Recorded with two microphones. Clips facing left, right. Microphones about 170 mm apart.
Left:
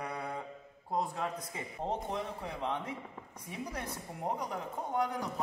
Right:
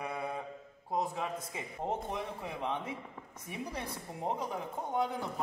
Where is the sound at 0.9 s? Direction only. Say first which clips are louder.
Even; 15° right (ahead or behind).